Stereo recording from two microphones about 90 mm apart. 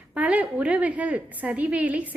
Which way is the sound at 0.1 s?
15° right (ahead or behind).